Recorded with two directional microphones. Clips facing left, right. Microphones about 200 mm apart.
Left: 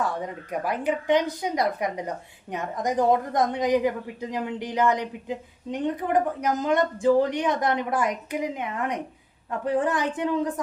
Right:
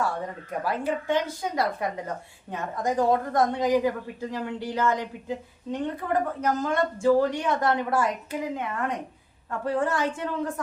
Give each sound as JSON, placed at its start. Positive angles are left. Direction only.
{"t": 0.6, "sound": "a woman's voice", "side_deg": 20}